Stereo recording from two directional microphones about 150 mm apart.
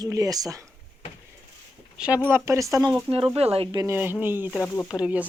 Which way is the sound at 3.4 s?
40° right (ahead or behind).